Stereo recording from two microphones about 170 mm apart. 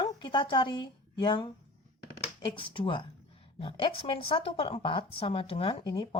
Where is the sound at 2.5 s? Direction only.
30° left (ahead or behind).